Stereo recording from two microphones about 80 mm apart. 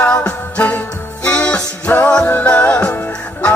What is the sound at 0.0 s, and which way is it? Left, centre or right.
Music, centre.